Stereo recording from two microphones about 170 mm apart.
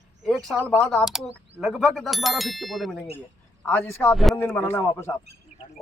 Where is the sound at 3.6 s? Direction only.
10° left (ahead or behind).